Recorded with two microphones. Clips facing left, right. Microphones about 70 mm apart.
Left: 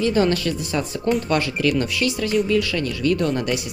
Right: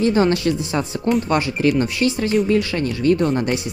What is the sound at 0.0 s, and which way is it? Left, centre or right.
Speech, right.